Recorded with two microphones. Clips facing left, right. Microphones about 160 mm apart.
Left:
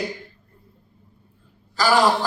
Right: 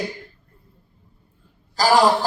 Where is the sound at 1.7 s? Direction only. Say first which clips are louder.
Right 2 dB; 35° right (ahead or behind).